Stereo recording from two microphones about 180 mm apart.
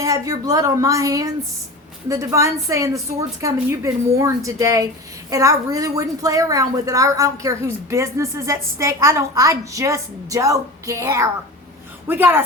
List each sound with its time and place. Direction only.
0.0 s a woman's voice: 20° right (ahead or behind)